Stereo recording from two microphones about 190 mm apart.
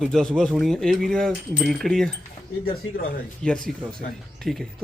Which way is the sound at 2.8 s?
90° left.